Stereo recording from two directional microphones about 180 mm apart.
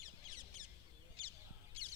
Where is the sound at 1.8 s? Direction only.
30° right (ahead or behind).